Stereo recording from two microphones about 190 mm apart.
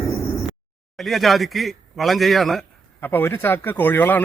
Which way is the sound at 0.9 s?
Centre (ahead or behind).